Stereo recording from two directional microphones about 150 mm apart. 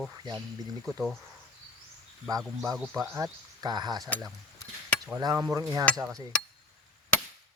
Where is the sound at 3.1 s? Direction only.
20° right (ahead or behind).